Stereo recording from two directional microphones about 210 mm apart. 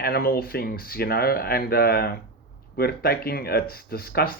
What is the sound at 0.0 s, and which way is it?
Speech, 45° left (ahead or behind).